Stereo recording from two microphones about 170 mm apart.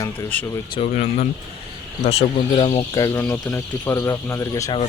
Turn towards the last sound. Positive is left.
turn(degrees=20)  # may be behind; listen again after turning